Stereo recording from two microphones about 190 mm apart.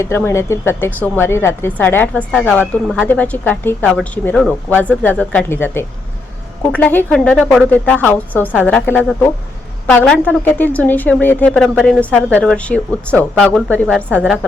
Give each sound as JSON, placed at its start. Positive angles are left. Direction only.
{"t": 0.2, "sound": "a woman's voice", "side_deg": 15}